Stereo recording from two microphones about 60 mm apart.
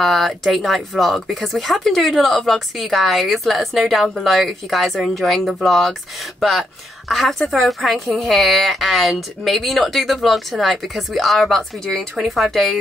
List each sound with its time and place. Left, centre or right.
0.0 s speech: centre
7.1 s speech: centre